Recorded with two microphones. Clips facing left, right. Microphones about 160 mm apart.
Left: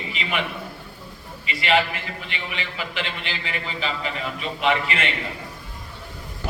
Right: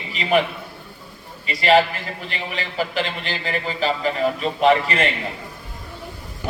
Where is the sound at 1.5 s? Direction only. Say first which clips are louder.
Right 5 dB; 40° right (ahead or behind).